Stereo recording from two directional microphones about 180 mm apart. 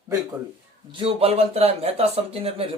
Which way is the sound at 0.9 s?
35° right (ahead or behind).